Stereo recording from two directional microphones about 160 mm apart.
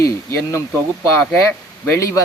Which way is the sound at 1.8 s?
20° left (ahead or behind).